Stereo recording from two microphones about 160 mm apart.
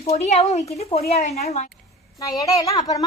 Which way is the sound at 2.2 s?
20° left (ahead or behind).